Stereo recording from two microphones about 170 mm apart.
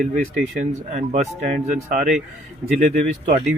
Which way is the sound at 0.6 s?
45° right (ahead or behind).